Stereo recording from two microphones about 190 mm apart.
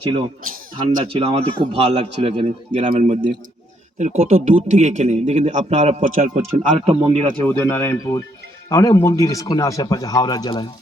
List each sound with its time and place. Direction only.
1.0 s speech: 30° right (ahead or behind)
7.4 s speech: 10° left (ahead or behind)